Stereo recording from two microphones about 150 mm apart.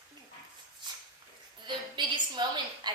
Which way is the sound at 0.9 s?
30° right (ahead or behind).